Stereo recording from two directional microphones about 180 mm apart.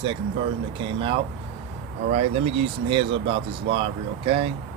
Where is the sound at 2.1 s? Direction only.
35° right (ahead or behind).